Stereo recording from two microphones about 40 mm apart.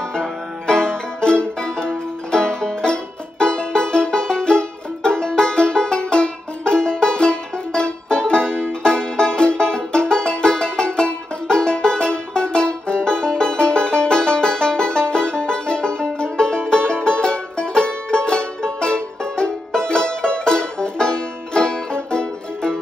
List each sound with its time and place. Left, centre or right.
0.1 s music: centre